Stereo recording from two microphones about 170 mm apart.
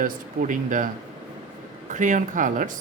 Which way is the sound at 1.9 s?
45° right (ahead or behind).